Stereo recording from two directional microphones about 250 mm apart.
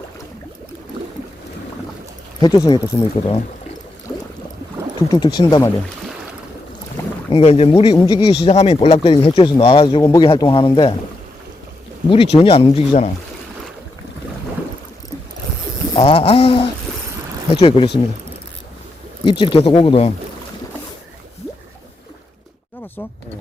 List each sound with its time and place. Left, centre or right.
2.4 s speech: centre
4.9 s speech: centre
7.3 s speech: left
12.0 s speech: left
16.0 s speech: left
19.2 s speech: centre